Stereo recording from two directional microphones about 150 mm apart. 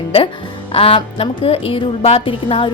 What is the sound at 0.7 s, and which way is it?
A woman's voice, 40° left (ahead or behind).